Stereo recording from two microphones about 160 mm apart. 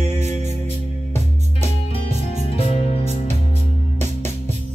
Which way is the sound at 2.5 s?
40° left (ahead or behind).